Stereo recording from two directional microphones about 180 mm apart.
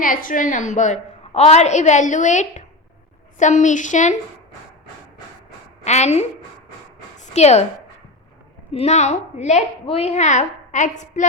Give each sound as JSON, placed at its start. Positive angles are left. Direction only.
{"t": 0.0, "sound": "a woman's voice", "side_deg": 50}
{"t": 5.8, "sound": "a woman's voice", "side_deg": 40}
{"t": 7.2, "sound": "a sound", "side_deg": 35}
{"t": 8.7, "sound": "a woman's voice", "side_deg": 35}